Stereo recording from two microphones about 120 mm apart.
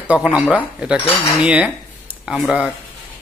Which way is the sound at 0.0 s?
10° right (ahead or behind).